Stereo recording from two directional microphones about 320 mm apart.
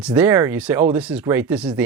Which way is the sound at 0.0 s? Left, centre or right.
Centre.